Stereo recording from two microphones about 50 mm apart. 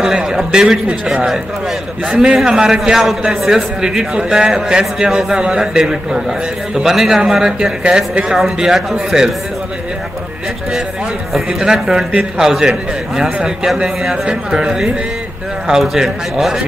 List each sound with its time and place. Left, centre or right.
0.0 s a man's voice: centre
8.3 s a man's voice: centre
11.3 s a man's voice: centre
15.6 s a man's voice: centre